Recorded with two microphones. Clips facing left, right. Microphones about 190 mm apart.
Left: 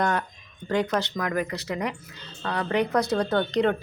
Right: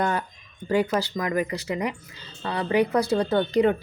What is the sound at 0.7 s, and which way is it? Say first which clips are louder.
Speech: right 2 dB; 10° right (ahead or behind).